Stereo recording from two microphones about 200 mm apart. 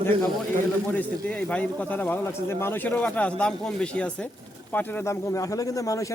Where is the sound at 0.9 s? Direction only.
10° left (ahead or behind).